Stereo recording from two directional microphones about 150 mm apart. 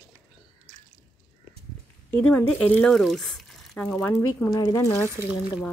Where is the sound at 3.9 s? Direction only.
15° left (ahead or behind).